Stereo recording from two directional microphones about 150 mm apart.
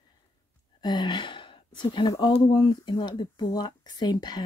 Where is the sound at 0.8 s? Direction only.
30° left (ahead or behind).